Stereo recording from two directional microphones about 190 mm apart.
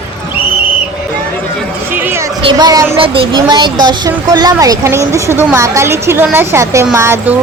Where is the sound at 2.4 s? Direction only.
20° right (ahead or behind).